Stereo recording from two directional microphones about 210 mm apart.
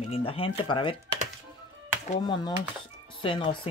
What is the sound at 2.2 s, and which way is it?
Speech, 20° left (ahead or behind).